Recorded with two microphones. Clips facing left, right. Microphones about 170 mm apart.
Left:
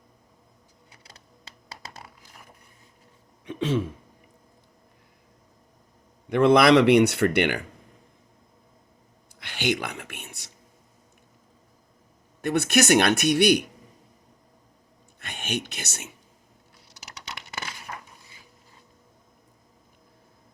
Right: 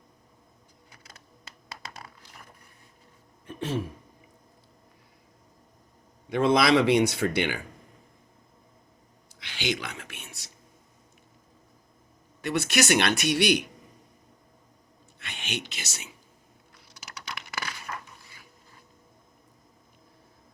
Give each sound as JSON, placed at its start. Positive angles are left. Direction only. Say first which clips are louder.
{"t": 3.4, "sound": "speech", "louder": "left 5 dB", "side_deg": 75}
{"t": 6.2, "sound": "speech", "louder": "left 5 dB", "side_deg": 60}
{"t": 9.4, "sound": "speech", "louder": "left 4 dB", "side_deg": 55}
{"t": 12.4, "sound": "speech", "louder": "left 4 dB", "side_deg": 55}
{"t": 15.2, "sound": "speech", "louder": "left 5 dB", "side_deg": 50}
{"t": 17.2, "sound": "a sound", "louder": "right 1 dB", "side_deg": 25}